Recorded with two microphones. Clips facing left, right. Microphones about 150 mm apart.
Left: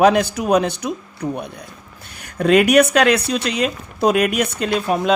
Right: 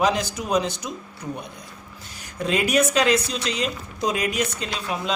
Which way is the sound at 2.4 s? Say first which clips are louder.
Left 8 dB; 65° left (ahead or behind).